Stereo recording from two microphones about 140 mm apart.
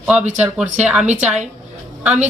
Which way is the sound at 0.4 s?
10° right (ahead or behind).